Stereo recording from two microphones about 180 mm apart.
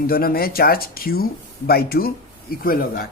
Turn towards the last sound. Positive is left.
turn(degrees=55)  # may be behind; listen again after turning